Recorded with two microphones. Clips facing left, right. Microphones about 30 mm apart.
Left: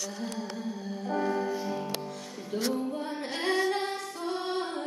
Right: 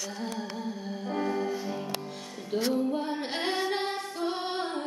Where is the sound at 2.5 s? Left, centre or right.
Right.